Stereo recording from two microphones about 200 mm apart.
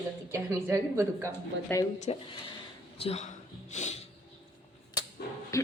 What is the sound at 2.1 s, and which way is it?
Speech, 30° left (ahead or behind).